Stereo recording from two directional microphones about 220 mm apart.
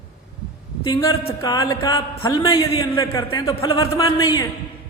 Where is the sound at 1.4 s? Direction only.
15° left (ahead or behind).